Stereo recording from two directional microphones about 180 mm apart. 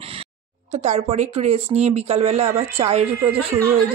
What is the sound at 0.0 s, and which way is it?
Speech, 30° right (ahead or behind).